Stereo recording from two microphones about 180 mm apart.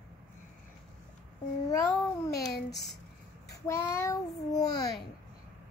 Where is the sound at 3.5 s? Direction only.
20° left (ahead or behind).